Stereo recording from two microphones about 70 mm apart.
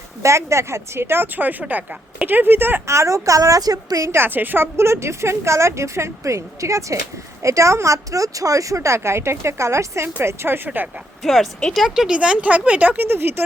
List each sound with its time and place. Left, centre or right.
0.2 s speech: right
2.8 s speech: right
4.1 s speech: right
11.2 s speech: centre
11.9 s speech: centre
13.0 s speech: right